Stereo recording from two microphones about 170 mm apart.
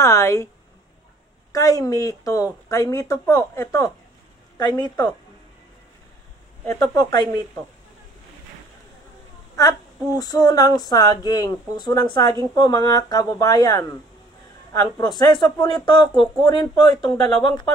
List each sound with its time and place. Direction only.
0.0 s a sound: 15° left (ahead or behind)
1.5 s speech: 20° left (ahead or behind)
6.6 s speech: 20° left (ahead or behind)
10.1 s speech: 25° left (ahead or behind)